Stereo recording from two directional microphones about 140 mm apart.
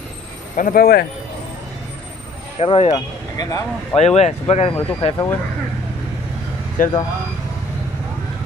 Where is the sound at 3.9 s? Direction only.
50° left (ahead or behind).